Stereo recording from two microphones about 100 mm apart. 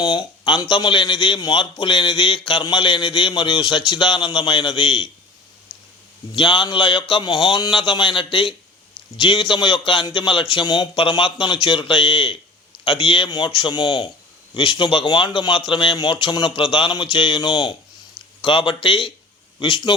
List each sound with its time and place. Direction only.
0.0 s speech: 45° left (ahead or behind)
6.3 s a man's voice: 60° left (ahead or behind)